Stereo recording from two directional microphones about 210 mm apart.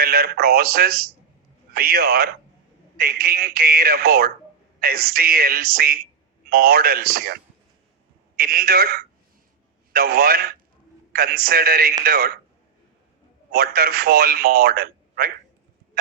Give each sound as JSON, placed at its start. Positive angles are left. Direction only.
{"t": 0.0, "sound": "a man's voice", "side_deg": -45}
{"t": 8.4, "sound": "a man's voice", "side_deg": -45}
{"t": 13.5, "sound": "a man's voice", "side_deg": -45}